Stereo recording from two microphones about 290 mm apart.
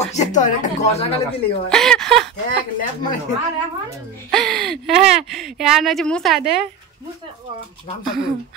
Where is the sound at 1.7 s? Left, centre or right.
Centre.